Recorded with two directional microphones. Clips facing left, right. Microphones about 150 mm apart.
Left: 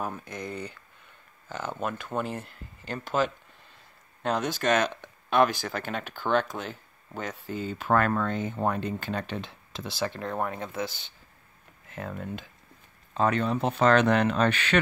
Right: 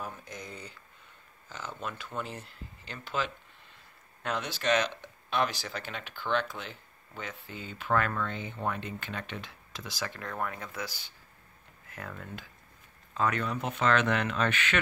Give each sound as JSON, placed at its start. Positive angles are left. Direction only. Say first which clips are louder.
{"t": 0.0, "sound": "speech", "louder": "left 7 dB", "side_deg": 60}